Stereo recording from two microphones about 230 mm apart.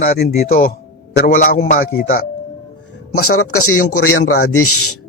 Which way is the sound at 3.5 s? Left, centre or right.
Left.